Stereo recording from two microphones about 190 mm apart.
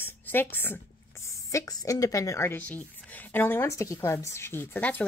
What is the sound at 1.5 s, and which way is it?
Speech, 20° left (ahead or behind).